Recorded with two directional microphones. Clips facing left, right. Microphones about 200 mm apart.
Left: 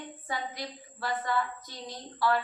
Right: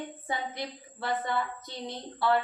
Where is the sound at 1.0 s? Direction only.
20° right (ahead or behind).